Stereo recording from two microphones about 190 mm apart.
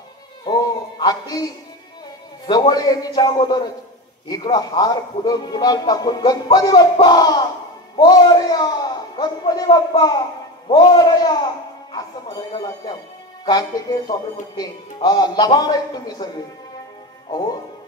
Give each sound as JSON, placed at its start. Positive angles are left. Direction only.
{"t": 0.5, "sound": "music", "side_deg": 20}
{"t": 2.4, "sound": "a man's voice", "side_deg": 25}
{"t": 12.8, "sound": "a man's voice", "side_deg": 20}